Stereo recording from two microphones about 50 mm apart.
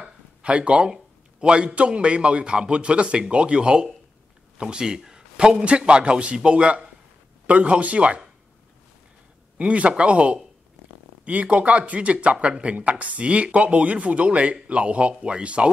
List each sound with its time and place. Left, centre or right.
0.0 s a sound: right
1.4 s speech: centre
9.6 s speech: right